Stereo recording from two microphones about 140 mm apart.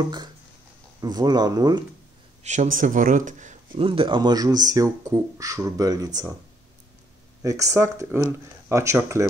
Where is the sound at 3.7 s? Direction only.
40° right (ahead or behind).